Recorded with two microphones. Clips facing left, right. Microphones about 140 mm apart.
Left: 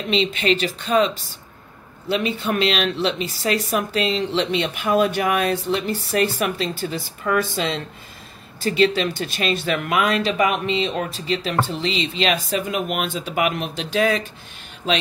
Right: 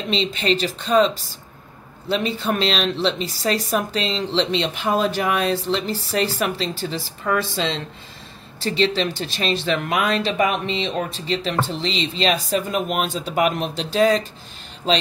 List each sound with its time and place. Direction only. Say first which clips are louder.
0.1 s a woman's voice: left 2 dB; 35° right (ahead or behind)
8.6 s a woman's voice: left 2 dB; 30° right (ahead or behind)